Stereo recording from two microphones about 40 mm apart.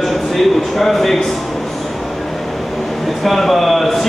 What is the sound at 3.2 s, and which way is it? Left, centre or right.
Speech, centre.